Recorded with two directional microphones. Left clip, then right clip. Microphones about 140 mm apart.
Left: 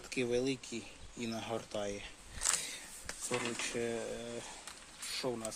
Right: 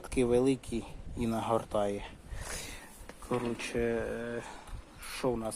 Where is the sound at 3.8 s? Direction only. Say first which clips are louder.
Right 6 dB; 10° left (ahead or behind).